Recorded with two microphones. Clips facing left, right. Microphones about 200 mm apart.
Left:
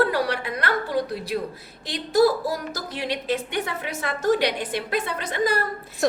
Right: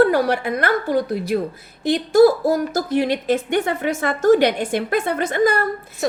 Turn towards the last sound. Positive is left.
turn(degrees=-50)  # may be behind; listen again after turning